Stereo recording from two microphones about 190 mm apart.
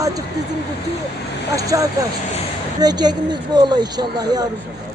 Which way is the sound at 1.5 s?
15° right (ahead or behind).